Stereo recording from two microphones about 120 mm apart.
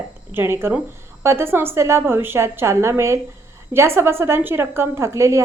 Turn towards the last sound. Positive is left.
turn(degrees=-25)  # may be behind; listen again after turning